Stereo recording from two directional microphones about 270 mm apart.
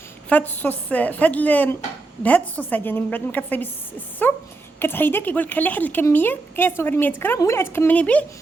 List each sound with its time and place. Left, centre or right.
0.3 s a woman's voice: centre